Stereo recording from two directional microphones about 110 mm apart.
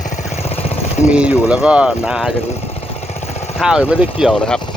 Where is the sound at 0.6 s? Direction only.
90° left.